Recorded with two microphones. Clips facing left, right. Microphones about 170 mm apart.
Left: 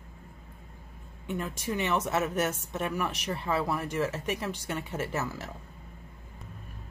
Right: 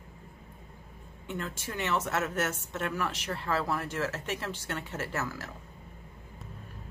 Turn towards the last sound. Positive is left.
turn(degrees=15)  # may be behind; listen again after turning